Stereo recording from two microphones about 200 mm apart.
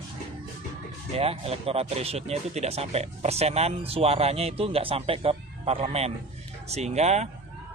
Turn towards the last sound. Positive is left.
turn(degrees=-35)  # may be behind; listen again after turning